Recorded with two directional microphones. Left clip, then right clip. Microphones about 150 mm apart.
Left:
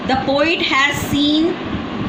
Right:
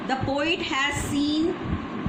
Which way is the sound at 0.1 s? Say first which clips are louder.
Left 9 dB; 50° left (ahead or behind).